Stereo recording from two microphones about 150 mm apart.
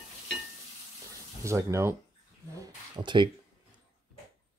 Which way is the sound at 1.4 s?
20° right (ahead or behind).